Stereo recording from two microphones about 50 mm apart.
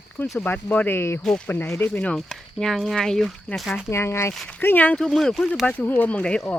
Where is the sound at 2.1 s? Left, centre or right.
Centre.